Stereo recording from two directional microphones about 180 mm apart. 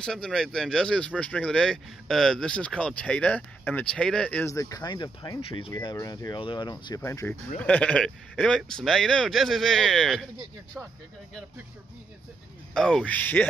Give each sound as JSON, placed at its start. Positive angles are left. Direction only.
{"t": 0.0, "sound": "speech", "side_deg": 5}
{"t": 5.7, "sound": "speech", "side_deg": 15}
{"t": 7.0, "sound": "speech", "side_deg": 15}
{"t": 12.7, "sound": "speech", "side_deg": 5}